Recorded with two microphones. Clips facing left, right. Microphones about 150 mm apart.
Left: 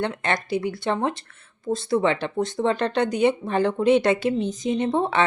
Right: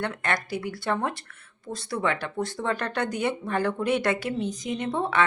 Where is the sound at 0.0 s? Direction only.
20° left (ahead or behind).